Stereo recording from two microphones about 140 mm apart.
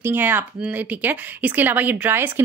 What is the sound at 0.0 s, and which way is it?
Speech, 15° right (ahead or behind).